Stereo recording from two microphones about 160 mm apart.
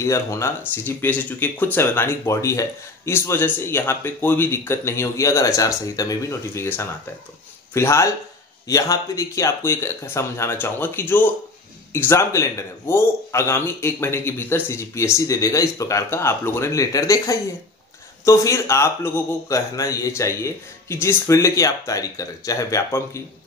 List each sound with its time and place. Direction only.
0.0 s a man's voice: 20° left (ahead or behind)